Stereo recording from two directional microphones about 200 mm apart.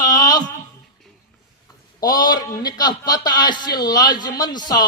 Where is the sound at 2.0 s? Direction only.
20° left (ahead or behind).